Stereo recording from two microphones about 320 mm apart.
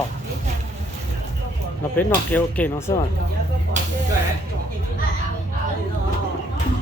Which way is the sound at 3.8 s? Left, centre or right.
Right.